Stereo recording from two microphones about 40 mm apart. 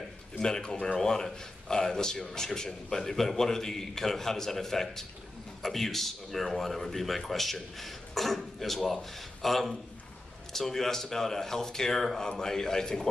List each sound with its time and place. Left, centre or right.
0.4 s speech: centre